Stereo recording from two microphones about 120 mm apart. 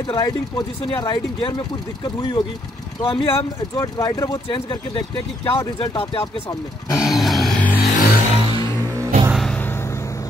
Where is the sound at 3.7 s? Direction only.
30° left (ahead or behind).